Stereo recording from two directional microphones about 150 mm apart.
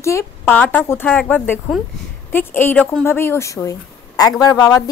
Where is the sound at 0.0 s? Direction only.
15° left (ahead or behind).